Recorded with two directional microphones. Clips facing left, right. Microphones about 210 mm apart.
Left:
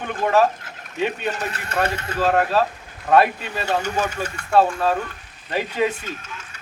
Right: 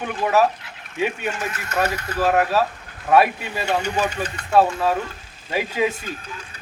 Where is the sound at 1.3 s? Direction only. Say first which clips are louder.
Even; 35° left (ahead or behind).